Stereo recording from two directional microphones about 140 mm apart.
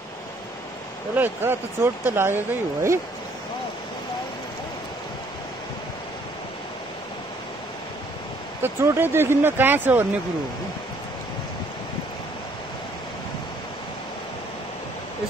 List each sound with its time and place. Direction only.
1.1 s speech: 15° right (ahead or behind)
8.6 s speech: 15° right (ahead or behind)